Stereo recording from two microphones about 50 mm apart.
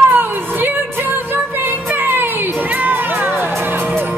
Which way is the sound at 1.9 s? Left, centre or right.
Right.